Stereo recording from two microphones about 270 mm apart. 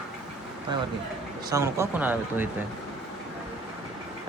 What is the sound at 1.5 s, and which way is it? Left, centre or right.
Speech, centre.